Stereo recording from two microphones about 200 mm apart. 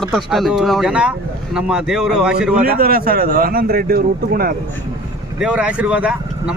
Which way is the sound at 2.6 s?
50° right (ahead or behind).